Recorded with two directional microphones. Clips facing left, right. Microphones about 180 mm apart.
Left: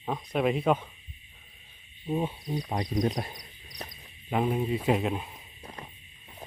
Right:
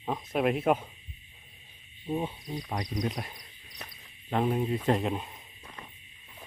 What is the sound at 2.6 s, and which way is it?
Speech, 25° left (ahead or behind).